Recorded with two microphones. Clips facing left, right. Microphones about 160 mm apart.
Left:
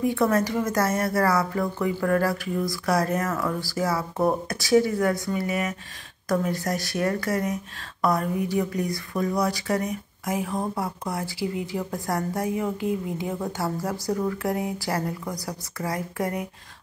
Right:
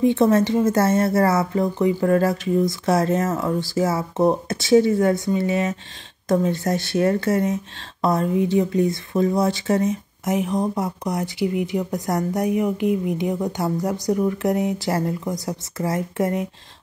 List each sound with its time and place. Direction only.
0.0 s speech: 25° right (ahead or behind)